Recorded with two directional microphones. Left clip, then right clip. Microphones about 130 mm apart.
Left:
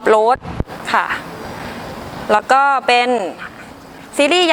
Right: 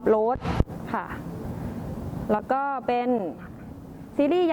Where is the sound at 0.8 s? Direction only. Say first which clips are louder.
Left 15 dB; 15° left (ahead or behind).